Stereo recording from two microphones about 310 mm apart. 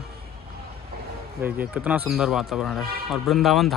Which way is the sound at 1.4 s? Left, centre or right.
Centre.